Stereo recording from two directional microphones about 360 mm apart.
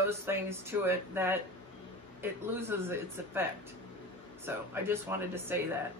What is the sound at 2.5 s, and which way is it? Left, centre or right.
Speech, centre.